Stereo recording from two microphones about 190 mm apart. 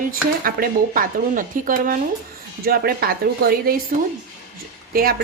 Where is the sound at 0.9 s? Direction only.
45° right (ahead or behind).